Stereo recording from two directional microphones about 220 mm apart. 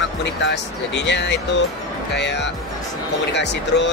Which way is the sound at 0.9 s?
55° left (ahead or behind).